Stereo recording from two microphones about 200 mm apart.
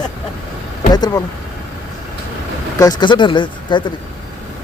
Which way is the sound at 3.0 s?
25° left (ahead or behind).